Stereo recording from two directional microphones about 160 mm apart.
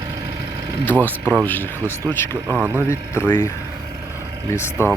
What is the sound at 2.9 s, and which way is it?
Speech, 15° left (ahead or behind).